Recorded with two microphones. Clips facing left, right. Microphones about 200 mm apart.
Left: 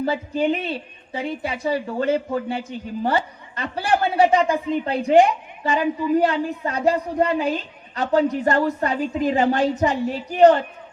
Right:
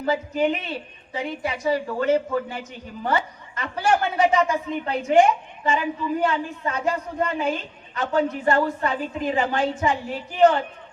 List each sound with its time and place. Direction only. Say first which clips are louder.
0.0 s a woman's voice: left 1 dB; 30° left (ahead or behind)